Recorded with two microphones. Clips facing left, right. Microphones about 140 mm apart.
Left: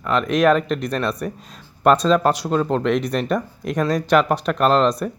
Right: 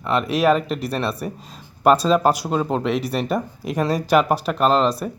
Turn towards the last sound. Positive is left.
turn(degrees=-5)  # may be behind; listen again after turning